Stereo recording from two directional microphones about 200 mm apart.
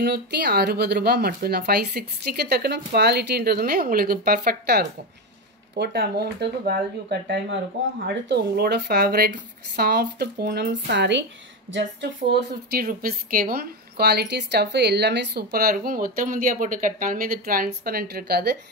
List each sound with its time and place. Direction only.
0.0 s a woman's voice: 55° right (ahead or behind)